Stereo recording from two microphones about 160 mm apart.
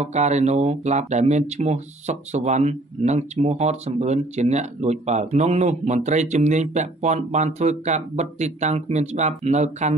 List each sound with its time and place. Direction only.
0.0 s speech: 45° right (ahead or behind)